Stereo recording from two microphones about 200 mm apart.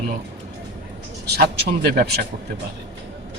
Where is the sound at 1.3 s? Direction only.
55° right (ahead or behind).